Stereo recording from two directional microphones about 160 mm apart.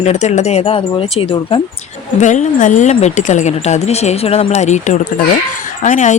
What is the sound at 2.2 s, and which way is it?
A woman's voice, 50° left (ahead or behind).